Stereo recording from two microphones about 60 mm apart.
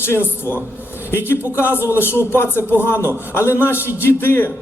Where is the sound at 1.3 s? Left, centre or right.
Left.